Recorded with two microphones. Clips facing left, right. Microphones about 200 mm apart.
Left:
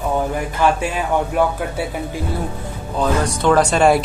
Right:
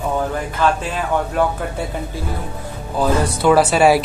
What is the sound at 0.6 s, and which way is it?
Speech, 15° left (ahead or behind).